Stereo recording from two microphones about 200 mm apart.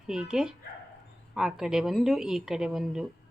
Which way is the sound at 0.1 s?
5° right (ahead or behind).